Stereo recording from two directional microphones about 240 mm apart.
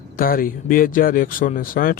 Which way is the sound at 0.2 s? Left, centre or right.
Left.